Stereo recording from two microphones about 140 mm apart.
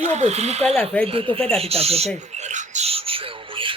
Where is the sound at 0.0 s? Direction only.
55° right (ahead or behind).